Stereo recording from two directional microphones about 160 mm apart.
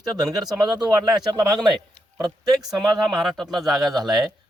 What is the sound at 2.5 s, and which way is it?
Speech, centre (ahead or behind).